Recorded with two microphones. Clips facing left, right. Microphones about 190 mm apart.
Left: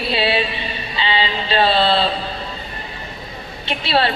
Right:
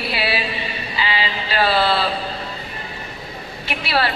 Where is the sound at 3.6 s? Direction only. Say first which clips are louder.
Left 3 dB; 25° left (ahead or behind).